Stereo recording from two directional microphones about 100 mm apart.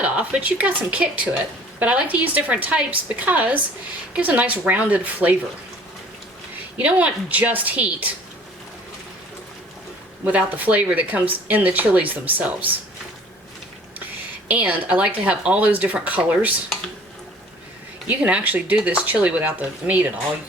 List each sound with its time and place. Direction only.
0.0 s speech: 15° right (ahead or behind)
6.7 s speech: 15° right (ahead or behind)
10.2 s speech: 15° right (ahead or behind)
14.4 s speech: 15° right (ahead or behind)
18.1 s speech: 15° right (ahead or behind)